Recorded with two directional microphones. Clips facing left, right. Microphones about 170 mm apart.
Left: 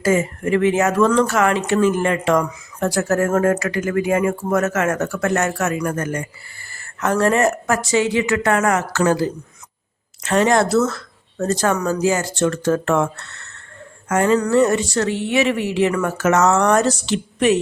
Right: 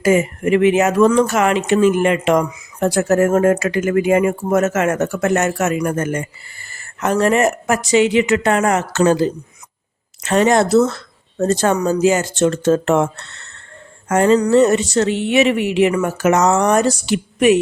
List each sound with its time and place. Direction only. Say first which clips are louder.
0.0 s speech: right 3 dB; 15° right (ahead or behind)